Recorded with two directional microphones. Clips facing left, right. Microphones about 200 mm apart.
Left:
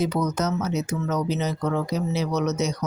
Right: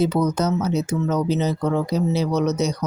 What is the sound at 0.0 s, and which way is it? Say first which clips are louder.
Speech: right 4 dB; 30° right (ahead or behind).